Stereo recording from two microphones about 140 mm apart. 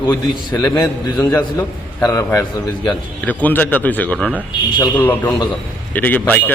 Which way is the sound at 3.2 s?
10° left (ahead or behind).